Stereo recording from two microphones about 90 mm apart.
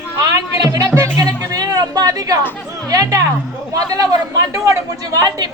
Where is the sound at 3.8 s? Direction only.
40° right (ahead or behind).